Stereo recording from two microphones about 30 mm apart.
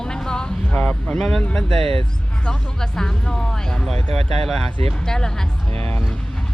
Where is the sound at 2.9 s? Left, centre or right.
Centre.